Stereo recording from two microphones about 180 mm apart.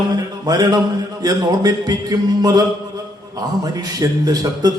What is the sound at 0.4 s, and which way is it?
Speech, 20° right (ahead or behind).